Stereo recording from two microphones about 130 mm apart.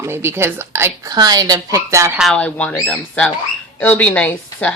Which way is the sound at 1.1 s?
30° right (ahead or behind).